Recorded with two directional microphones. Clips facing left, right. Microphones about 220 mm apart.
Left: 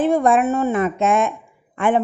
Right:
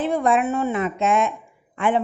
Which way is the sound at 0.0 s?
50° left (ahead or behind).